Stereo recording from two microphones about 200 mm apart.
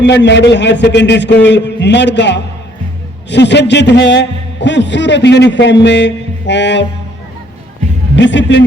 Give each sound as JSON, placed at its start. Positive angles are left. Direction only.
{"t": 0.0, "sound": "a man's voice", "side_deg": 60}
{"t": 8.1, "sound": "a man's voice", "side_deg": 65}